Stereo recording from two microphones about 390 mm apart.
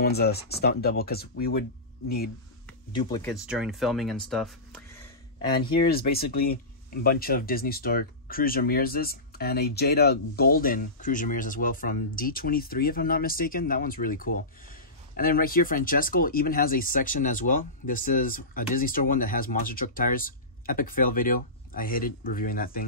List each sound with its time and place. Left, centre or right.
0.0 s speech: left
3.0 s speech: centre
5.6 s speech: left